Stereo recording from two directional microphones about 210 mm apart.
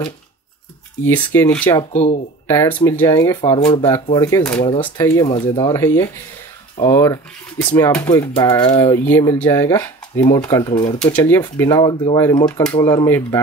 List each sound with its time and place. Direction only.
1.0 s speech: 10° left (ahead or behind)
1.6 s speech: 20° left (ahead or behind)
1.9 s speech: 30° left (ahead or behind)
2.4 s speech: 10° left (ahead or behind)
11.0 s speech: 10° left (ahead or behind)